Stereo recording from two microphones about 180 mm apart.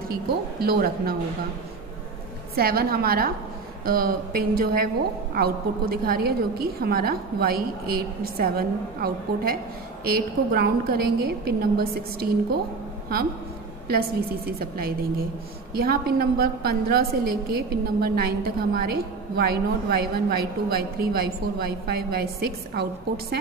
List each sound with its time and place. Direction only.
0.1 s a woman's voice: 60° right (ahead or behind)
2.5 s a woman's voice: 60° right (ahead or behind)
13.8 s a woman's voice: 55° right (ahead or behind)